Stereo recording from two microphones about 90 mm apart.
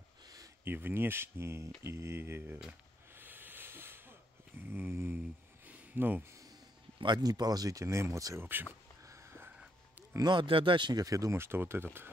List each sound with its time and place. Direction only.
0.7 s speech: 25° right (ahead or behind)
3.2 s a sound: 20° right (ahead or behind)
4.6 s speech: 25° right (ahead or behind)
5.7 s a sound: 20° right (ahead or behind)
7.0 s speech: 55° right (ahead or behind); by 8.4 s 35° right (ahead or behind)
8.4 s speech: 25° right (ahead or behind)
9.0 s a sound: 35° right (ahead or behind)
10.1 s speech: 55° right (ahead or behind)
11.1 s speech: 40° right (ahead or behind)